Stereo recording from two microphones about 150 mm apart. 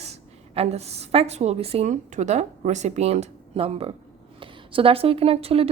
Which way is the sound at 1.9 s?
55° right (ahead or behind).